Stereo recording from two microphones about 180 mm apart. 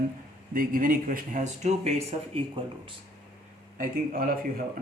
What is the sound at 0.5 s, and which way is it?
Speech, 50° right (ahead or behind).